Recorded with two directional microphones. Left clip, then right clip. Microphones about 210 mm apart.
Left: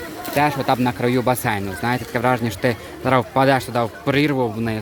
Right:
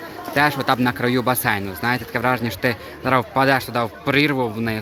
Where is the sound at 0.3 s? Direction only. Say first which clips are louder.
Even; 5° left (ahead or behind).